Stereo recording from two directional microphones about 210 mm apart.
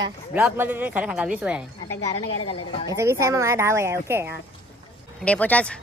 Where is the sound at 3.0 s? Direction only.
15° right (ahead or behind).